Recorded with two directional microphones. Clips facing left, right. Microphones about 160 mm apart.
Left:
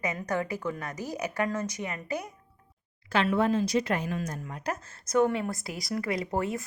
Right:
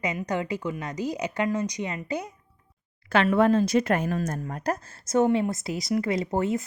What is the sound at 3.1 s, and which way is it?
A woman's voice, 60° right (ahead or behind).